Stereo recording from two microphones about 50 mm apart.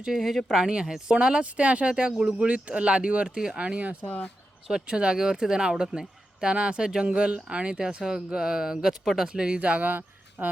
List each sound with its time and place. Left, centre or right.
0.2 s speech: centre
0.7 s speech: centre
3.3 s speech: centre
3.6 s speech: right
4.0 s speech: left
4.7 s speech: centre
9.3 s speech: centre